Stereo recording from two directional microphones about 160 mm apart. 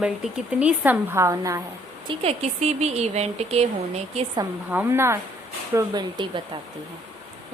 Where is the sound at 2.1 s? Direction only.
40° right (ahead or behind).